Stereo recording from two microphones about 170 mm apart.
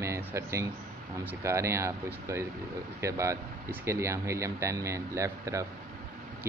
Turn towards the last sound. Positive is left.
turn(degrees=-15)  # may be behind; listen again after turning